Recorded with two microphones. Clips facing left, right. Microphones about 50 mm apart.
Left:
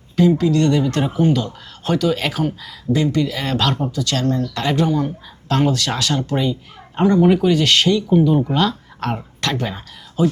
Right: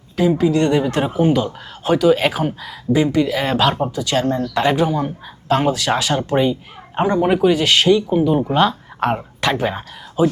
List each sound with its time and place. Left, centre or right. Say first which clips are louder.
0.2 s speech: even; centre